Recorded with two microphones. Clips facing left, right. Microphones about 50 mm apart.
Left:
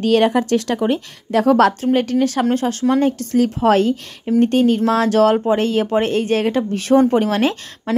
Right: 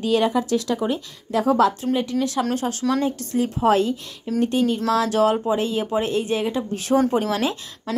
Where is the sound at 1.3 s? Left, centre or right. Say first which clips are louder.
Left 5 dB; left.